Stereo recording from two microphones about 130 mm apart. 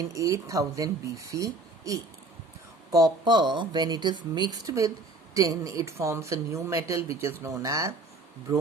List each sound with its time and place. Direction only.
0.1 s speech: 25° right (ahead or behind)